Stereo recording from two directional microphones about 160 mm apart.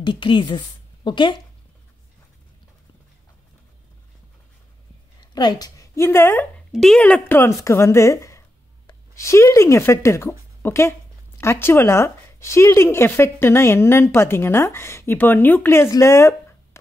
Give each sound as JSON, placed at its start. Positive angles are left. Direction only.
{"t": 0.0, "sound": "a woman's voice", "side_deg": 30}
{"t": 5.3, "sound": "a woman's voice", "side_deg": 25}
{"t": 6.7, "sound": "speech", "side_deg": 0}